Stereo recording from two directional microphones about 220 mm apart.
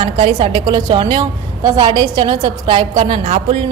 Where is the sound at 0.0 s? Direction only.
20° right (ahead or behind).